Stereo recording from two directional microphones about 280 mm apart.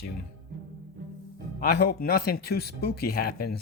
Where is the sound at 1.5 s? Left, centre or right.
Left.